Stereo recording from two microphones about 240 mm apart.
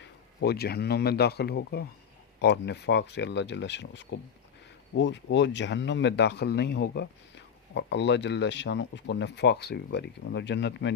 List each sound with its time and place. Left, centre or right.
0.0 s speech: left